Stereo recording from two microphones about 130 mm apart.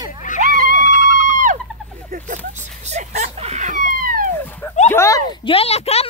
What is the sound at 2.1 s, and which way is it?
Speech, 75° right (ahead or behind).